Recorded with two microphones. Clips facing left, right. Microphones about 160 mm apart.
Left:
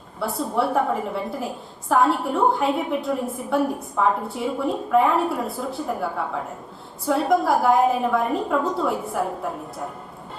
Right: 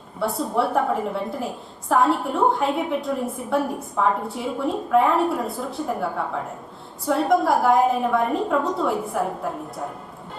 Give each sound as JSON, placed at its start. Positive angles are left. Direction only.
{"t": 0.2, "sound": "a woman's voice", "side_deg": 0}